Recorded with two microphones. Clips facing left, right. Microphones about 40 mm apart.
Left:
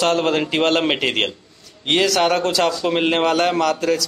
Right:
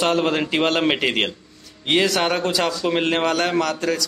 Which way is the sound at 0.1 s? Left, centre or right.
Centre.